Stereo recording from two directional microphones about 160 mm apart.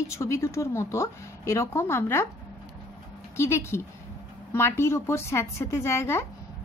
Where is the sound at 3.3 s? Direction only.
15° left (ahead or behind).